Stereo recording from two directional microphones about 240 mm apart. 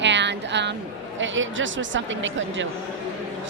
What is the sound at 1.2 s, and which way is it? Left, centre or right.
A woman's voice, right.